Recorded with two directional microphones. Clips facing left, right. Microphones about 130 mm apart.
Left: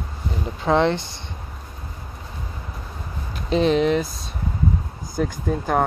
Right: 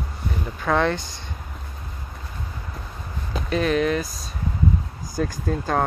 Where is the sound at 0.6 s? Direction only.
25° left (ahead or behind).